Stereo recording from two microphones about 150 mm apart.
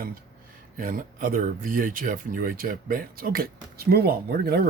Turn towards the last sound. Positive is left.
turn(degrees=-90)